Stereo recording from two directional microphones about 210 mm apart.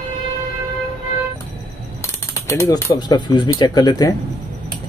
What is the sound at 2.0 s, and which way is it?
Speech, 15° left (ahead or behind).